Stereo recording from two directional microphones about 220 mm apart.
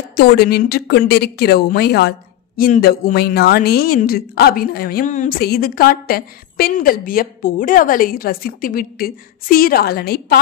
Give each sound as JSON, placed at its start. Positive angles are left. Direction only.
{"t": 0.1, "sound": "a woman's voice", "side_deg": 45}